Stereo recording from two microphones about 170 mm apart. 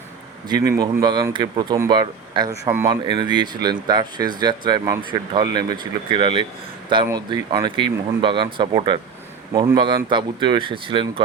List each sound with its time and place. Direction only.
0.4 s speech: 25° right (ahead or behind)